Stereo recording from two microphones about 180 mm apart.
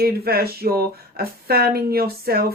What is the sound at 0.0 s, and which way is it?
Speech, 60° right (ahead or behind).